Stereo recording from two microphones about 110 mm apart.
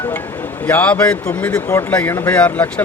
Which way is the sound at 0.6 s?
15° left (ahead or behind).